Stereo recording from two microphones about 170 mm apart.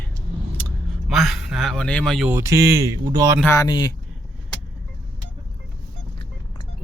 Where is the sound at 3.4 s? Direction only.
20° left (ahead or behind).